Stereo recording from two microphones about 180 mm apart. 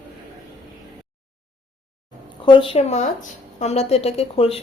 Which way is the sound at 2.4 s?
30° left (ahead or behind).